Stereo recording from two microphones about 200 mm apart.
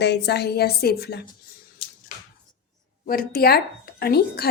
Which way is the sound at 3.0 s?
45° left (ahead or behind).